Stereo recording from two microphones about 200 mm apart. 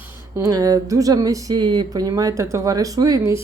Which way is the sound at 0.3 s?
15° right (ahead or behind).